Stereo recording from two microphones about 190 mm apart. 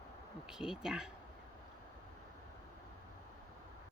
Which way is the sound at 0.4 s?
5° right (ahead or behind).